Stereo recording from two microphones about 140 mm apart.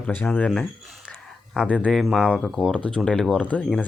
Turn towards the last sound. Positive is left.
turn(degrees=10)  # may be behind; listen again after turning